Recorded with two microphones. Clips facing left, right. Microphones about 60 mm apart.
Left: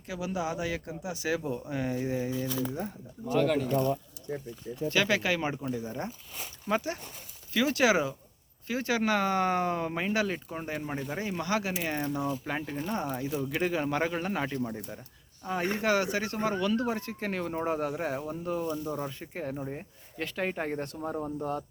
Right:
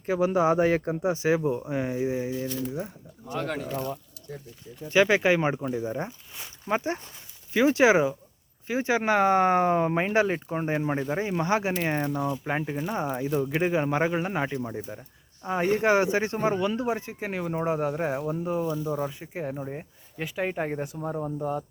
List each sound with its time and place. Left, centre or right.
0.0 s speech: right; by 2.9 s centre
4.9 s speech: right; by 21.6 s centre